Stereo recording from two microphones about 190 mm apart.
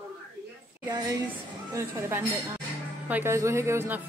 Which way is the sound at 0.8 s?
20° right (ahead or behind).